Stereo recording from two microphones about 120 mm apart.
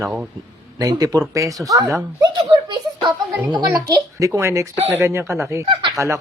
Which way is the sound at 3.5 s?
30° right (ahead or behind).